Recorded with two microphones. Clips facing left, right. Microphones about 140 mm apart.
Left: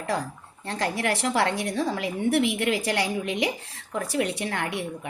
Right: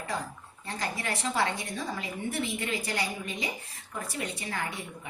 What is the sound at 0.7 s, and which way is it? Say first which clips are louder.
A woman's voice: left 7 dB; 70° left (ahead or behind).